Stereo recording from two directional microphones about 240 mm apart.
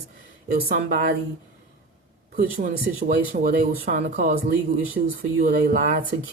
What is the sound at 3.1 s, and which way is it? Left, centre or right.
Speech, right.